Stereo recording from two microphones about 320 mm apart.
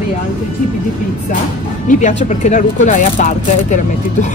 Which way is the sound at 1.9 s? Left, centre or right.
Left.